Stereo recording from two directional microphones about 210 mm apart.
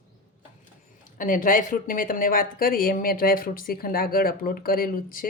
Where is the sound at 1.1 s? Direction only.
40° left (ahead or behind).